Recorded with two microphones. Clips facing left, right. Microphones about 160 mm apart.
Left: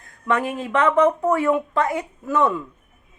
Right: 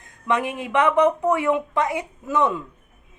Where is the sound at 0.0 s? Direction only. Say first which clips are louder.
Left 1 dB; 20° right (ahead or behind).